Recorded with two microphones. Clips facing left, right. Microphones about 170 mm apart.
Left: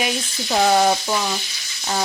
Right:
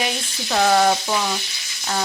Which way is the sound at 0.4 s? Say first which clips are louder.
Even; 10° left (ahead or behind).